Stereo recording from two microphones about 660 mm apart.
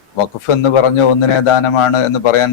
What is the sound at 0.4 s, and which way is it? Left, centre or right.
A man's voice, left.